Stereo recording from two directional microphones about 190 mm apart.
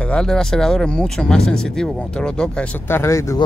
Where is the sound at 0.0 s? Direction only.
5° left (ahead or behind).